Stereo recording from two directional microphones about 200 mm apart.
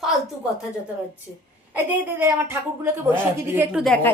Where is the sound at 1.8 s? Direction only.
10° right (ahead or behind).